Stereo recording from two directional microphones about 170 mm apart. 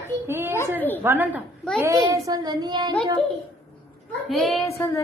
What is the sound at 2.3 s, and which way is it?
Child singing, 25° right (ahead or behind).